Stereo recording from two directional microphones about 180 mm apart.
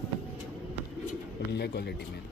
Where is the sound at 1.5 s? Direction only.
65° left (ahead or behind).